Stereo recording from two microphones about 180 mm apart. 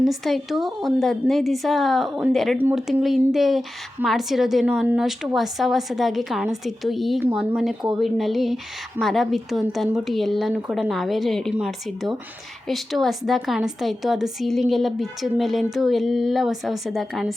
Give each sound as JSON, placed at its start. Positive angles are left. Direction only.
{"t": 0.0, "sound": "speech", "side_deg": 0}